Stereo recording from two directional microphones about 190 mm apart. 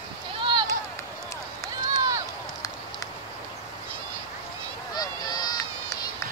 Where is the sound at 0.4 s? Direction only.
25° right (ahead or behind).